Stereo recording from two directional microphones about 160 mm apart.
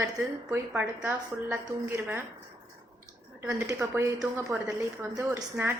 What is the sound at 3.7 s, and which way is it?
A woman's voice, 15° right (ahead or behind).